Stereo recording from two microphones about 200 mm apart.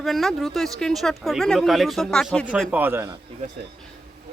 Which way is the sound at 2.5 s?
5° right (ahead or behind).